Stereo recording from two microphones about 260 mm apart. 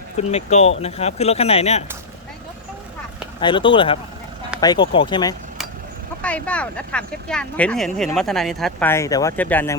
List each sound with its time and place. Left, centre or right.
0.2 s speech: left
3.4 s speech: centre
6.2 s speech: centre